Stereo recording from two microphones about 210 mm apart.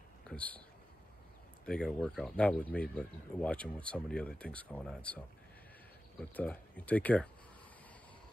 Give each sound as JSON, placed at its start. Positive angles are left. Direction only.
{"t": 0.3, "sound": "a sound", "side_deg": 5}
{"t": 1.7, "sound": "speech", "side_deg": 5}
{"t": 6.3, "sound": "speech", "side_deg": 5}